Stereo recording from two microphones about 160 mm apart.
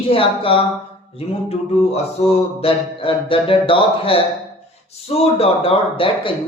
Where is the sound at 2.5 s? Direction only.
35° left (ahead or behind).